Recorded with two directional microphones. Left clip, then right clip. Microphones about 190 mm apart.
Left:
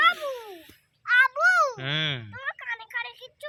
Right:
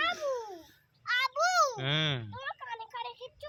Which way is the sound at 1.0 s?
30° left (ahead or behind).